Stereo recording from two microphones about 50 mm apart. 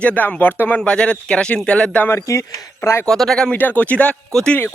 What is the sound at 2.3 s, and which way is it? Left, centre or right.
Speech, left.